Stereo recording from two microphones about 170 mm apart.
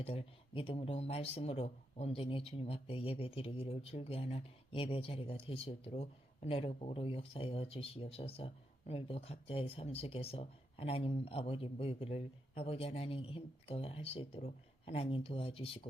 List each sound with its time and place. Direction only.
0.0 s speech: 35° left (ahead or behind)